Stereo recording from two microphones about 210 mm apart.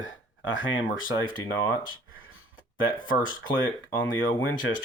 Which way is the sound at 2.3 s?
70° left (ahead or behind).